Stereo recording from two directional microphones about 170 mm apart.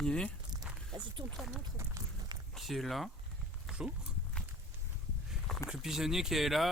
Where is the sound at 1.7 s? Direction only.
20° right (ahead or behind).